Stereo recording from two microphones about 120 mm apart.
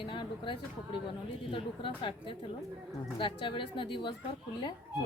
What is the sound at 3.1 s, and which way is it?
Speech, 45° left (ahead or behind).